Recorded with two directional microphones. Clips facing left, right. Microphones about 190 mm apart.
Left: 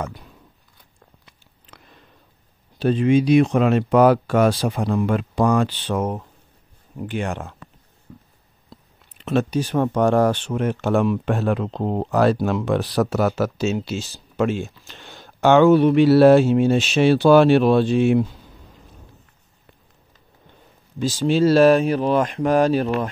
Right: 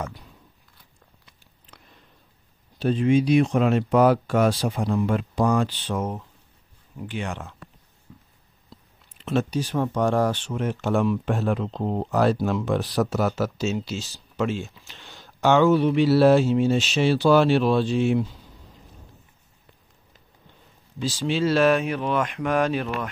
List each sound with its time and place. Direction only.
2.8 s speech: 75° left (ahead or behind)
7.0 s speech: 50° left (ahead or behind)
8.1 s a sound: 50° left (ahead or behind)
9.2 s speech: 60° left (ahead or behind)
21.0 s speech: 45° left (ahead or behind)